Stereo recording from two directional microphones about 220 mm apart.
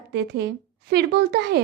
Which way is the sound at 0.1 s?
50° right (ahead or behind).